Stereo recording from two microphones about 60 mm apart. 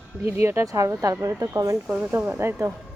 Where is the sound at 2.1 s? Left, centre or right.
Right.